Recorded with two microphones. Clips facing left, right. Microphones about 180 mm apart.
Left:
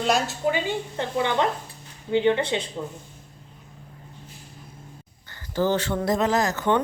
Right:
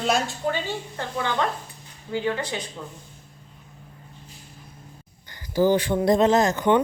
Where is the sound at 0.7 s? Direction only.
20° left (ahead or behind).